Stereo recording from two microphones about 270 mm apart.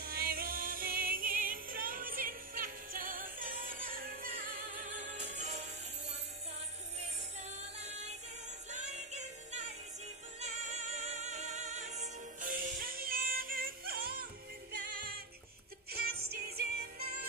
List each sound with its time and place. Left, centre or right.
0.0 s music: right
7.3 s music: right